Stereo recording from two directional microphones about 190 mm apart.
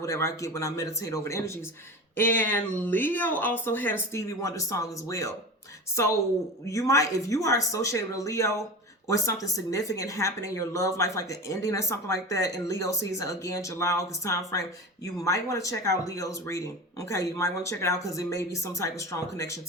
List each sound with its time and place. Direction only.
0.0 s a woman's voice: 15° left (ahead or behind)